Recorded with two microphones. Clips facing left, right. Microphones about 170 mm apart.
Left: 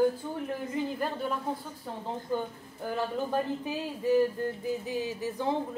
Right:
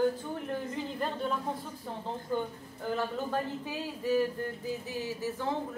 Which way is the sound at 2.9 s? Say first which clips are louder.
Left 3 dB; 15° left (ahead or behind).